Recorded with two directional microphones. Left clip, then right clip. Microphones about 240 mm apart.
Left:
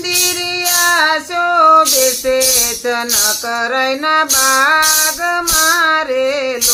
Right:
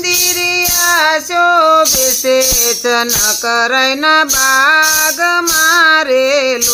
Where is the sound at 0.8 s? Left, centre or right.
Right.